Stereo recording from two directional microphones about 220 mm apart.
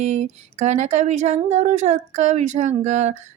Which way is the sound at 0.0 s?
30° right (ahead or behind).